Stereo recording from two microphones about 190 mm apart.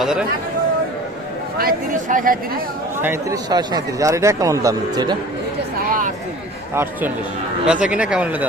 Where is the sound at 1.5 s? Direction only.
45° right (ahead or behind).